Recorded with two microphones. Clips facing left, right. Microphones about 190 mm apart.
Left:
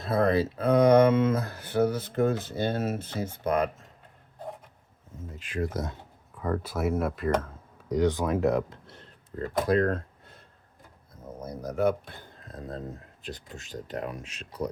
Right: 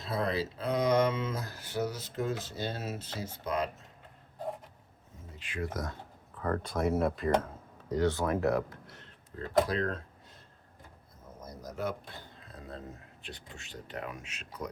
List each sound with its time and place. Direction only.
0.0 s speech: 55° left (ahead or behind)
5.4 s speech: 40° left (ahead or behind)
5.7 s speech: 25° left (ahead or behind)
6.4 s speech: 10° left (ahead or behind)
7.9 s speech: 15° left (ahead or behind)
9.3 s speech: 45° left (ahead or behind)
11.3 s speech: 60° left (ahead or behind)
12.4 s a sound: 45° left (ahead or behind)
13.2 s speech: 40° left (ahead or behind)